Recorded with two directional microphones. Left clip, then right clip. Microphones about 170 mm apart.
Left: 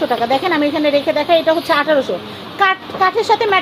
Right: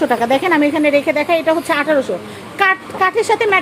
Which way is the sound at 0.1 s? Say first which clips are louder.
Right 1 dB; 50° right (ahead or behind).